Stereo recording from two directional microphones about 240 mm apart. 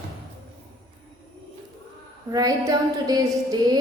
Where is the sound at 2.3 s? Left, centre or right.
Centre.